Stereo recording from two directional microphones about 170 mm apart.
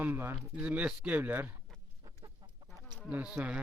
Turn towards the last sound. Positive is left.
turn(degrees=-5)  # may be behind; listen again after turning